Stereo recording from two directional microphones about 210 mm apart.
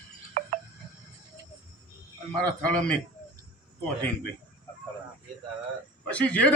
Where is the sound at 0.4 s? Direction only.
35° right (ahead or behind).